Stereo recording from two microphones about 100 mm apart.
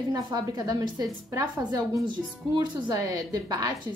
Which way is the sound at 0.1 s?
45° right (ahead or behind).